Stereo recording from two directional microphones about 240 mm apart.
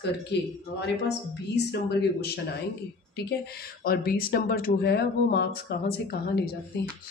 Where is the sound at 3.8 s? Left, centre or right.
Left.